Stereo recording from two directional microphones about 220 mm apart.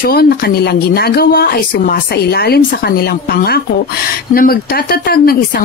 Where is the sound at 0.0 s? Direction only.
45° left (ahead or behind).